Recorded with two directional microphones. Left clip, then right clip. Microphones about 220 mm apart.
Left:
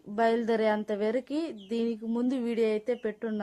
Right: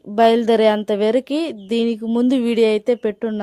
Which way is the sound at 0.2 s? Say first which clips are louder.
Right 12 dB; 45° right (ahead or behind).